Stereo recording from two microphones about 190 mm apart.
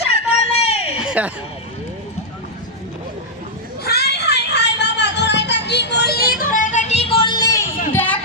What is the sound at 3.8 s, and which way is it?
Music, 55° left (ahead or behind).